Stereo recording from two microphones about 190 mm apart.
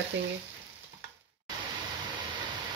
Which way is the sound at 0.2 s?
70° right (ahead or behind).